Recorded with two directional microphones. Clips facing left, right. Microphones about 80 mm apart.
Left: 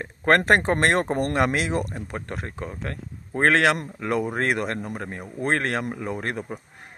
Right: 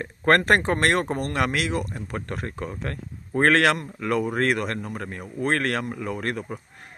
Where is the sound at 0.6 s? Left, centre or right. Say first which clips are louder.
Left 1 dB; left.